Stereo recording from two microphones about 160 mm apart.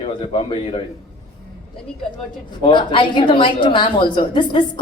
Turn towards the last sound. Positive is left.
turn(degrees=30)  # may be behind; listen again after turning